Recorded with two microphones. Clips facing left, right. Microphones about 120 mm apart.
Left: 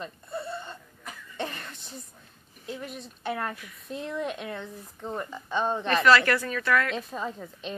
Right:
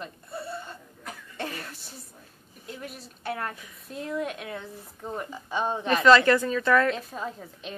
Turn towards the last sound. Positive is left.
turn(degrees=0)  # may be behind; listen again after turning